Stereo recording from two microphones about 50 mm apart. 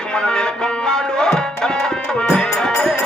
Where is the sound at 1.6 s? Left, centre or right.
Centre.